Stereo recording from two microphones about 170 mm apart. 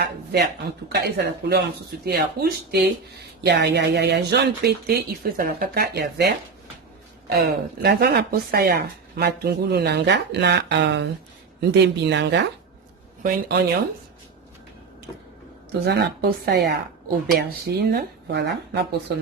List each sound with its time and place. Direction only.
0.0 s speech: 75° right (ahead or behind)
3.4 s speech: 80° right
13.5 s speech: 70° right (ahead or behind)
15.8 s speech: 80° right